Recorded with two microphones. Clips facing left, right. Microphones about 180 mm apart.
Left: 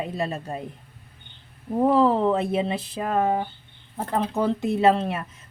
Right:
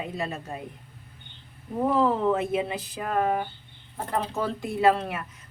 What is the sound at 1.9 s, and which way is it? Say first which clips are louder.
Speech: left 3 dB; 30° left (ahead or behind).